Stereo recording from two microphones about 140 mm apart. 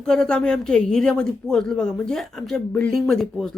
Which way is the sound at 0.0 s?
5° left (ahead or behind).